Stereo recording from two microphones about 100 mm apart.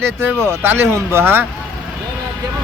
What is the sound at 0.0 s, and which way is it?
Speech, 25° right (ahead or behind).